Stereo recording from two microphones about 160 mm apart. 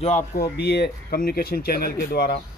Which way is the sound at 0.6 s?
85° left.